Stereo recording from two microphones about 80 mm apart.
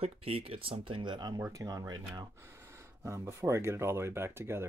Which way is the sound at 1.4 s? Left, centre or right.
Right.